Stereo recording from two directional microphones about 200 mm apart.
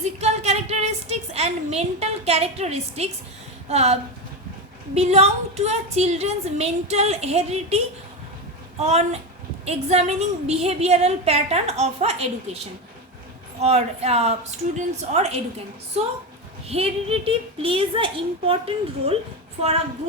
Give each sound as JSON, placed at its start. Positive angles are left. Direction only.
{"t": 0.0, "sound": "a sound", "side_deg": -35}
{"t": 3.7, "sound": "a woman's voice", "side_deg": -30}
{"t": 4.9, "sound": "a woman's voice", "side_deg": -30}
{"t": 8.8, "sound": "a woman's voice", "side_deg": -35}
{"t": 13.6, "sound": "a woman's voice", "side_deg": -30}
{"t": 16.6, "sound": "a child's voice", "side_deg": -30}